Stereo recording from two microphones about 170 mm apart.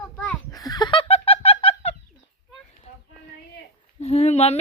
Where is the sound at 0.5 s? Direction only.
20° left (ahead or behind); by 2.0 s 35° left (ahead or behind).